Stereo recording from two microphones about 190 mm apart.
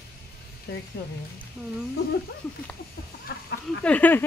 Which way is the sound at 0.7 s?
60° left (ahead or behind).